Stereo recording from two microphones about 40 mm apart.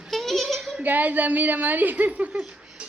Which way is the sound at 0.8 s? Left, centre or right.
Right.